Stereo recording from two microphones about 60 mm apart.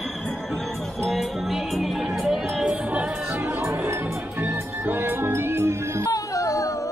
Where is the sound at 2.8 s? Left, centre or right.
Right.